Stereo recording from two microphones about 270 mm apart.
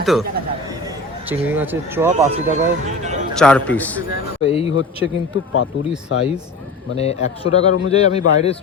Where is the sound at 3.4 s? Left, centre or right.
Centre.